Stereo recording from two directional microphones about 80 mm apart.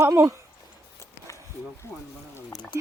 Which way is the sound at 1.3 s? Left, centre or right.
Left.